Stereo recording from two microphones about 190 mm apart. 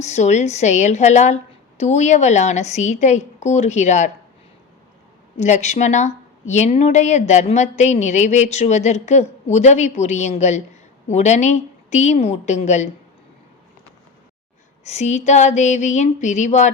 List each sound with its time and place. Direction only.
0.0 s a woman's voice: 35° left (ahead or behind)
5.4 s a woman's voice: 35° left (ahead or behind)
14.8 s a woman's voice: 35° left (ahead or behind)